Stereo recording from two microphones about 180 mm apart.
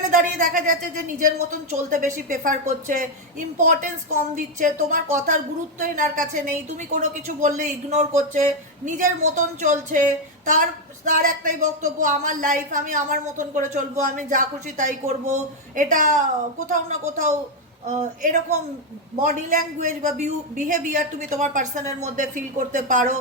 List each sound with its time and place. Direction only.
0.3 s a woman's voice: 45° right (ahead or behind)